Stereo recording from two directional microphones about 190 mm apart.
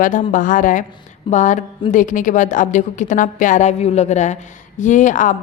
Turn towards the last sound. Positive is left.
turn(degrees=40)  # may be behind; listen again after turning